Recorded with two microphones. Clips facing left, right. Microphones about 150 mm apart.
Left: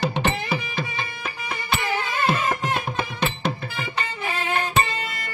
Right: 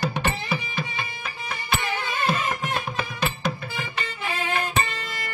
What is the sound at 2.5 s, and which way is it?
Music, 65° left (ahead or behind).